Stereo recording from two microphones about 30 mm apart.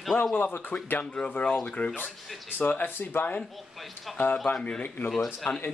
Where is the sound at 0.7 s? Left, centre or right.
Left.